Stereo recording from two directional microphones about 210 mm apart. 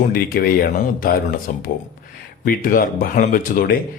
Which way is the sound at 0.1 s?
45° left (ahead or behind).